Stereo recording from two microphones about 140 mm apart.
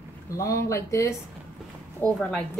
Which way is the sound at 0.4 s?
20° left (ahead or behind).